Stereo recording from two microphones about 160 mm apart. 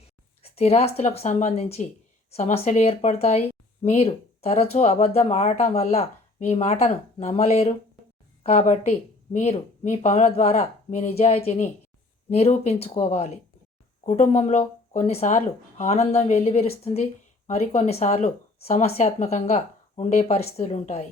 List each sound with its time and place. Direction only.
0.4 s speech: 40° left (ahead or behind)